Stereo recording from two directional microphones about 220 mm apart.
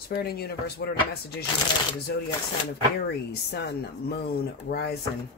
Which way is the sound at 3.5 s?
50° left (ahead or behind).